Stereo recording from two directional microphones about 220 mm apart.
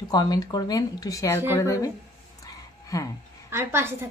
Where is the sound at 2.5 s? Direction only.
15° left (ahead or behind).